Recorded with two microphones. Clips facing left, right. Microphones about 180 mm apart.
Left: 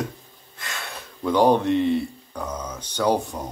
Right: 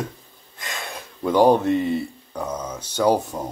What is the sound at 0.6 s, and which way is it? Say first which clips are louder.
Speech: right 2 dB; 15° right (ahead or behind).